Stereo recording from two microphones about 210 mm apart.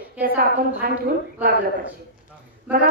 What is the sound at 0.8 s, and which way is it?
Speech, 45° right (ahead or behind).